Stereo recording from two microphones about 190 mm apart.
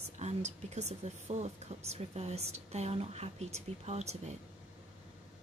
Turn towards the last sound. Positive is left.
turn(degrees=-35)  # may be behind; listen again after turning